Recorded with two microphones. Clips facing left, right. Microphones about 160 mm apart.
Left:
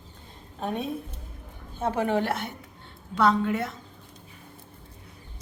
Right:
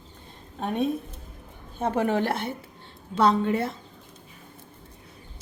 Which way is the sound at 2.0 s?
35° right (ahead or behind).